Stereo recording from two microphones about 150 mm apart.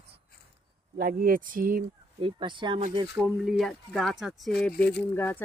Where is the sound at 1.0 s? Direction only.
70° right (ahead or behind).